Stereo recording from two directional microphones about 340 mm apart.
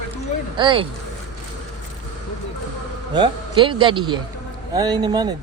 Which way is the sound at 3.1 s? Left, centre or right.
Centre.